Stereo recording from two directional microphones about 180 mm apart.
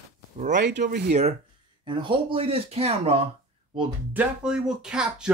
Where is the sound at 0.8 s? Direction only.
60° right (ahead or behind).